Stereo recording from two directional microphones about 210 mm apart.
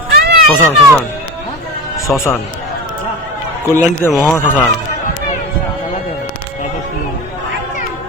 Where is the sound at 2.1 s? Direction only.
5° left (ahead or behind).